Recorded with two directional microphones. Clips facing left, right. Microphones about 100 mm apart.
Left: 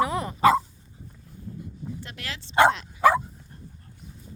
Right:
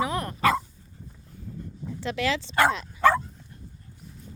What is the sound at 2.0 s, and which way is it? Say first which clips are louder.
Speech: right 12 dB; 90° right.